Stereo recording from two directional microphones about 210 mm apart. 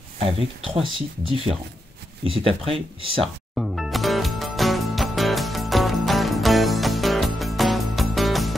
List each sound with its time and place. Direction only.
0.2 s speech: 25° right (ahead or behind)
2.2 s speech: 25° right (ahead or behind)
3.5 s music: centre (ahead or behind)